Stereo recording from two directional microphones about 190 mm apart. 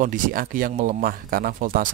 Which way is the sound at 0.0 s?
45° right (ahead or behind).